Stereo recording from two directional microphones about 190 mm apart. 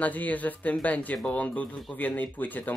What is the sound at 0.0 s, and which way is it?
Speech, 10° left (ahead or behind).